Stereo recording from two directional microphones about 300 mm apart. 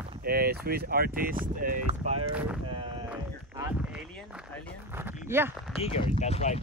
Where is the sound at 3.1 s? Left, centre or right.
Centre.